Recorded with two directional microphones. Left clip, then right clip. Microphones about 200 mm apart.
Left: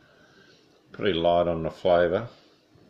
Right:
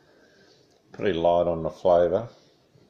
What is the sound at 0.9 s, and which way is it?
Speech, 10° left (ahead or behind).